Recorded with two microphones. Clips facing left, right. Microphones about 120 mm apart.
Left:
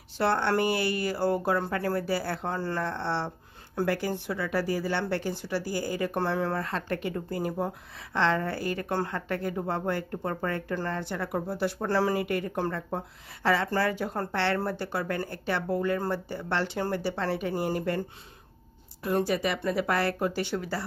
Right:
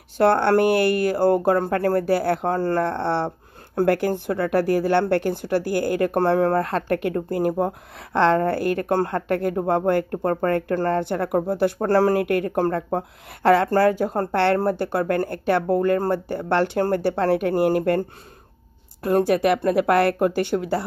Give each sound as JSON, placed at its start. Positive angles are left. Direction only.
{"t": 0.2, "sound": "speech", "side_deg": -55}
{"t": 19.0, "sound": "speech", "side_deg": -55}